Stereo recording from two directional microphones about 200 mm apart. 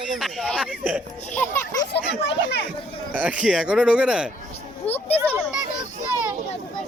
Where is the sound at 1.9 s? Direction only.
60° left (ahead or behind).